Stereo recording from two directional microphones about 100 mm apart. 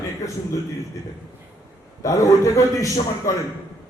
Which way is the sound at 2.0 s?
35° left (ahead or behind).